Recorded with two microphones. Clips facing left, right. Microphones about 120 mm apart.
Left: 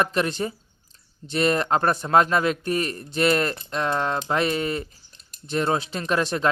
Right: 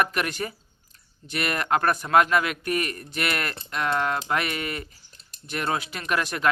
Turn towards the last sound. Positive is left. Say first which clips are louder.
# left 4 dB
turn(degrees=30)  # may be behind; listen again after turning